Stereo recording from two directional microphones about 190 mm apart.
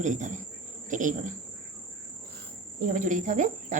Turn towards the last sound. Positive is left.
turn(degrees=-40)  # may be behind; listen again after turning